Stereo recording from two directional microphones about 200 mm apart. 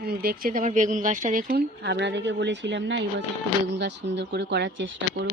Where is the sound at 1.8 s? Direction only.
60° right (ahead or behind).